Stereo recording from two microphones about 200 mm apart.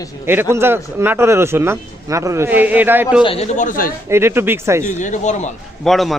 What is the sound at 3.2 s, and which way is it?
Speech, 30° left (ahead or behind).